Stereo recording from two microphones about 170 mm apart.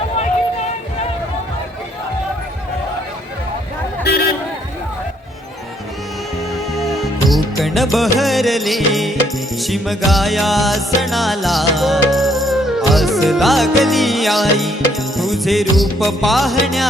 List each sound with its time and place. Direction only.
4.0 s a sound: 65° left (ahead or behind)
6.7 s music of bollywood: centre (ahead or behind)
9.6 s music: centre (ahead or behind)